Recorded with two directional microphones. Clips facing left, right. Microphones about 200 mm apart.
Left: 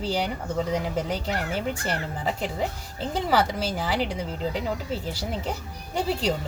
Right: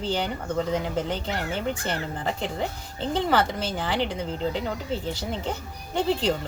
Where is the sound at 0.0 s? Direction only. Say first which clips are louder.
Even; 10° left (ahead or behind).